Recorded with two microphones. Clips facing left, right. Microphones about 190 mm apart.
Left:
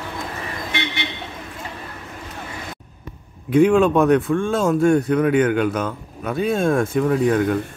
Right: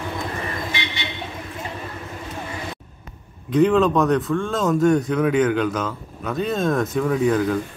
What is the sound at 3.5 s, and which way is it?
Speech, 10° left (ahead or behind).